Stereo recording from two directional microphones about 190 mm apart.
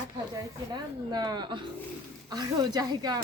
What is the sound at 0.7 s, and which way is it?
A woman's voice, 20° right (ahead or behind).